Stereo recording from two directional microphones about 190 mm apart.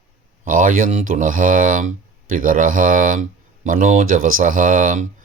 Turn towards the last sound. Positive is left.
turn(degrees=-45)  # may be behind; listen again after turning